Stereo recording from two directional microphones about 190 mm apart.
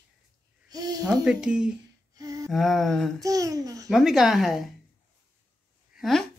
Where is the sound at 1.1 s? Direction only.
5° right (ahead or behind).